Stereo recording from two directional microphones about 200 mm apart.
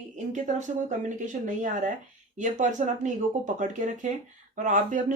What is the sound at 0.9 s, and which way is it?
A woman's voice, 40° right (ahead or behind).